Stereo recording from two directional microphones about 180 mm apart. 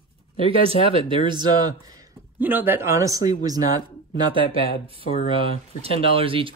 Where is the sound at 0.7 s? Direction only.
30° right (ahead or behind).